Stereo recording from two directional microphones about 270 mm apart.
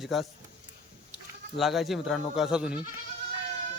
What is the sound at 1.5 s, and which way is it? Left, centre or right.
Speech, centre.